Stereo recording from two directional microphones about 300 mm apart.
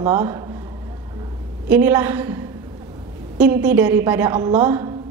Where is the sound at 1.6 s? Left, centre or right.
Centre.